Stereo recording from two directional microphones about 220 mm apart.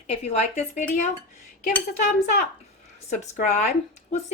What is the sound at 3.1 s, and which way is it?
Speech, 35° left (ahead or behind).